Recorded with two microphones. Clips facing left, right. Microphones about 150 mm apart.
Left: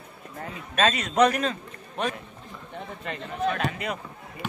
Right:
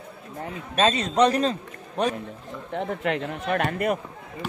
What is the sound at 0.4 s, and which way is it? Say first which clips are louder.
A man's voice: right 2 dB; 25° right (ahead or behind).